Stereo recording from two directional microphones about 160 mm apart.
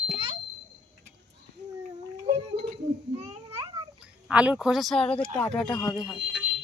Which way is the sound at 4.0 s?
5° right (ahead or behind).